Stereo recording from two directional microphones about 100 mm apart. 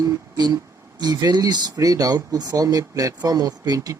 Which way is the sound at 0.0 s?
45° right (ahead or behind).